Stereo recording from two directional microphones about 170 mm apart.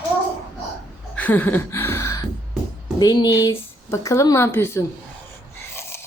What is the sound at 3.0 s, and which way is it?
Speech, 25° left (ahead or behind).